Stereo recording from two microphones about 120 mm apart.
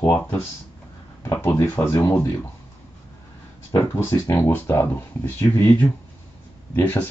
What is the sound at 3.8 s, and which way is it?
Speech, 20° left (ahead or behind).